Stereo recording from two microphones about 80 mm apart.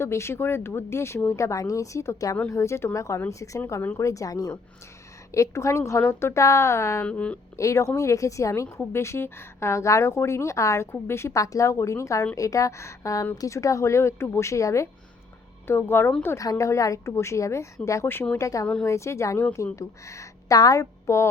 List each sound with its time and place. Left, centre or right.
0.0 s a woman's voice: left
5.3 s a woman's voice: left
7.0 s speech: centre
7.5 s a woman's voice: left
15.6 s speech: left
16.4 s a woman's voice: left
18.6 s speech: centre
18.9 s a woman's voice: left